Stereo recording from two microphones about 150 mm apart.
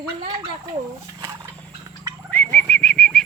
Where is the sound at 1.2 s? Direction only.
20° right (ahead or behind).